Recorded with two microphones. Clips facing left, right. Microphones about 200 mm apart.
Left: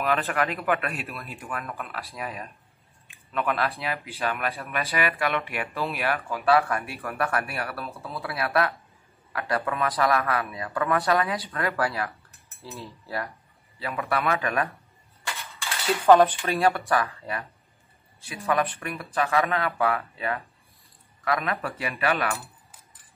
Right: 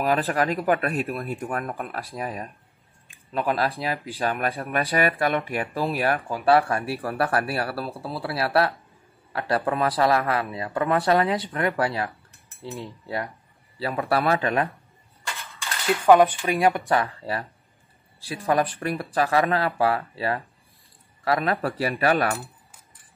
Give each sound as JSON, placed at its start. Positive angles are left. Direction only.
{"t": 0.0, "sound": "speech", "side_deg": -35}
{"t": 1.1, "sound": "speech", "side_deg": -50}
{"t": 13.7, "sound": "speech", "side_deg": -35}
{"t": 15.6, "sound": "speech", "side_deg": -10}